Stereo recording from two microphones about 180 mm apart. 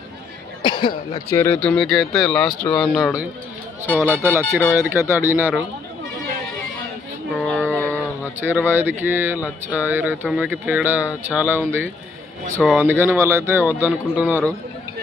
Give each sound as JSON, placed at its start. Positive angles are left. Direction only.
{"t": 0.6, "sound": "cough", "side_deg": 25}
{"t": 1.3, "sound": "speech", "side_deg": 10}
{"t": 3.8, "sound": "speech", "side_deg": 10}
{"t": 4.1, "sound": "a man's voice", "side_deg": -15}
{"t": 7.4, "sound": "a sound", "side_deg": 5}
{"t": 8.4, "sound": "a man's voice", "side_deg": -10}